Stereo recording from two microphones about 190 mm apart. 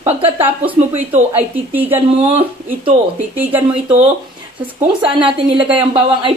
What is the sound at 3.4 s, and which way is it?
Speech, 10° right (ahead or behind).